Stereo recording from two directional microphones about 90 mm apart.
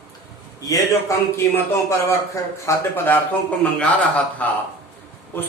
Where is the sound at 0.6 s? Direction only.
40° left (ahead or behind).